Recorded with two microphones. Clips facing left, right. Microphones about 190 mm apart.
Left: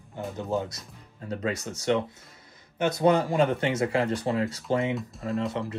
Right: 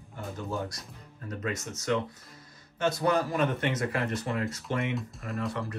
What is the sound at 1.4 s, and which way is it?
Speech, 35° left (ahead or behind).